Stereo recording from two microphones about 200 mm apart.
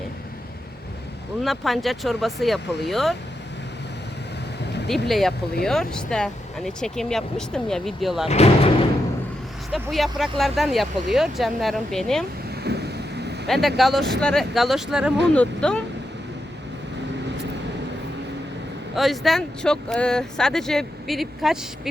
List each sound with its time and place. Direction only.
1.5 s speech: centre (ahead or behind)
5.0 s speech: centre (ahead or behind)
8.3 s speech: 30° left (ahead or behind)
9.7 s speech: centre (ahead or behind)
12.6 s a sound: 55° right (ahead or behind)
13.5 s speech: centre (ahead or behind)
18.9 s speech: centre (ahead or behind)